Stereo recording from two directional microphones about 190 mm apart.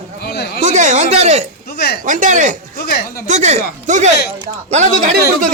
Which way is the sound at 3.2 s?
40° right (ahead or behind).